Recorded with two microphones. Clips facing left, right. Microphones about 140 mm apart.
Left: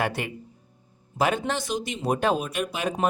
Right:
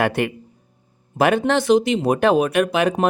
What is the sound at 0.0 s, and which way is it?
Speech, 65° right (ahead or behind).